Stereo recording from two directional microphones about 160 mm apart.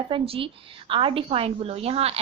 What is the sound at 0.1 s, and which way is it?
A woman's voice, 35° right (ahead or behind).